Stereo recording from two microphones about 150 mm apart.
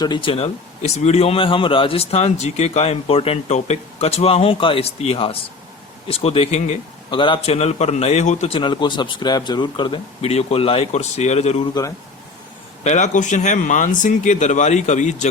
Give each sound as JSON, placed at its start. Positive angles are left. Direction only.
{"t": 0.0, "sound": "a man's voice", "side_deg": 35}
{"t": 8.5, "sound": "a man's voice", "side_deg": 30}
{"t": 11.7, "sound": "speech", "side_deg": 20}
{"t": 12.8, "sound": "speech", "side_deg": 50}